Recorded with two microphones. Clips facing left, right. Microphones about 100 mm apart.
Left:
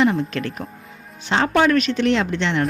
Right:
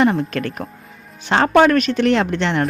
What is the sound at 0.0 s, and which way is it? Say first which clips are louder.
A woman's voice: right 2 dB; 50° right (ahead or behind).